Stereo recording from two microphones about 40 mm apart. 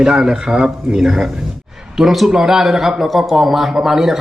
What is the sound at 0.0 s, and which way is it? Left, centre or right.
A man's voice, centre.